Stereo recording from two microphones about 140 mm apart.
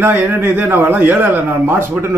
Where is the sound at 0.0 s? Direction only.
15° right (ahead or behind).